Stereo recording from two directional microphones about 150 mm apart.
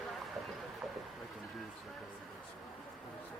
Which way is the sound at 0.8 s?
Centre (ahead or behind).